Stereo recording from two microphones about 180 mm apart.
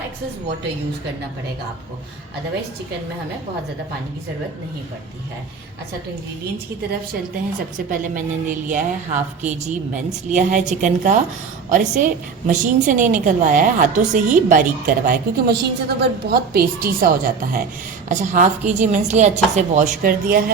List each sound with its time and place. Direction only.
7.9 s a woman's voice: 45° right (ahead or behind)